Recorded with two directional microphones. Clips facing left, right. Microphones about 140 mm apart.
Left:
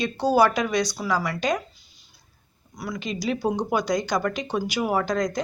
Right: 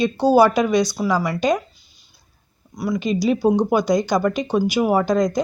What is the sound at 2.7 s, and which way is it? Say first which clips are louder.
Speech: right 9 dB; 20° right (ahead or behind).